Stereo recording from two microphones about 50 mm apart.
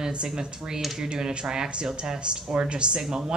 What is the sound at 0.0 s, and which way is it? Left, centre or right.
A woman's voice, right.